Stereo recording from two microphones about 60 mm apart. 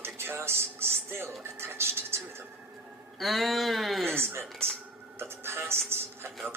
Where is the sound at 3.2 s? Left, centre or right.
Centre.